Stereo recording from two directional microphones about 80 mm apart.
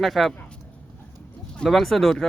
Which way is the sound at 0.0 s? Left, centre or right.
Centre.